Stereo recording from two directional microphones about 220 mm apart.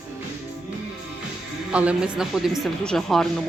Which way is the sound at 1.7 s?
5° right (ahead or behind).